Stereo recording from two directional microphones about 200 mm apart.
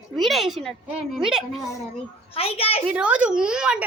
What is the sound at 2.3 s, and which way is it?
Speech, 30° left (ahead or behind).